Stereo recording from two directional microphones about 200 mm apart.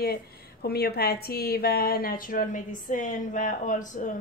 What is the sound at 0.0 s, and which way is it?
Speech, 50° left (ahead or behind).